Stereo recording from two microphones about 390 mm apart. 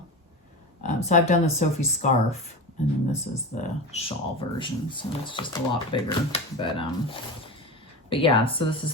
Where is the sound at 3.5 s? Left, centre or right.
Centre.